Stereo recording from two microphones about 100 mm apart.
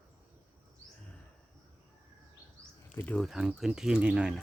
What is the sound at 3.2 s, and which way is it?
Speech, 5° right (ahead or behind).